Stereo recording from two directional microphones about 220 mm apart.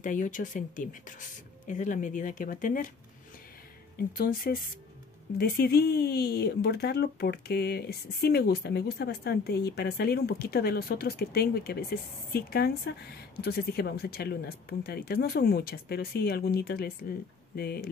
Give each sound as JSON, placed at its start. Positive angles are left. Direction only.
{"t": 0.0, "sound": "speech", "side_deg": 35}
{"t": 4.2, "sound": "speech", "side_deg": 40}